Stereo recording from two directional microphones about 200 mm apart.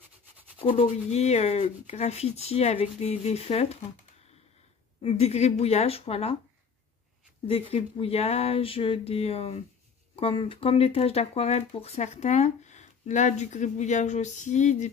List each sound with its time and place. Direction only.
0.7 s speech: 35° left (ahead or behind)
5.0 s speech: 30° left (ahead or behind)
7.4 s speech: 30° left (ahead or behind)